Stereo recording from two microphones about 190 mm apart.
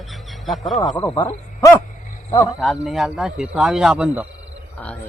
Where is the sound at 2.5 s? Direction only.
Centre (ahead or behind).